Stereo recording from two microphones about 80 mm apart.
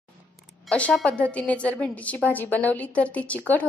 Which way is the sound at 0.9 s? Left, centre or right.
Centre.